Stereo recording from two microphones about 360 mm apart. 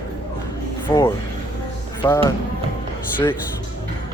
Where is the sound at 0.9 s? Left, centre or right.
Centre.